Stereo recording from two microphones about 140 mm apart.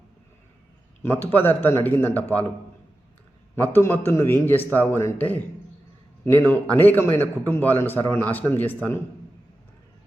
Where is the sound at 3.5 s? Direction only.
15° left (ahead or behind).